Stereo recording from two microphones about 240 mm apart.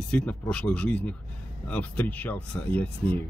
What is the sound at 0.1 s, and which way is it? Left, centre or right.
Speech, centre.